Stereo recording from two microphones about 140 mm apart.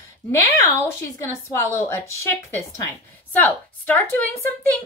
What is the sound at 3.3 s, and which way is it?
A woman's voice, 10° left (ahead or behind).